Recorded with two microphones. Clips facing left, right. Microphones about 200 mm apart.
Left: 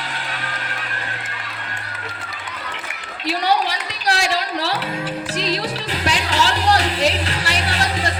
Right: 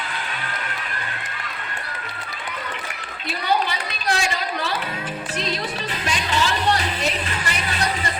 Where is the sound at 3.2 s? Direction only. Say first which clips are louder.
Left 3 dB; 75° left (ahead or behind).